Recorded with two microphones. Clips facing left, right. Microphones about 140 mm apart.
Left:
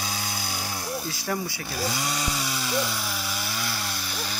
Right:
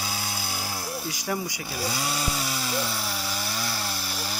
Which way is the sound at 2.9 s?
30° right (ahead or behind).